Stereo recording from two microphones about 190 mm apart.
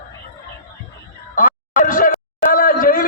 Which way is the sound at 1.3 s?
45° left (ahead or behind).